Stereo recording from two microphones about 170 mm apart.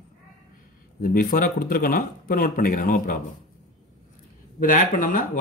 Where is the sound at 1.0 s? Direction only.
55° left (ahead or behind).